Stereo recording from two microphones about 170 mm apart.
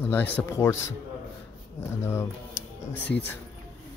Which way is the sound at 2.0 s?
15° left (ahead or behind).